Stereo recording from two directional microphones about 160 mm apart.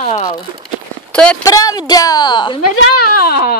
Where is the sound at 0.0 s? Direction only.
45° left (ahead or behind).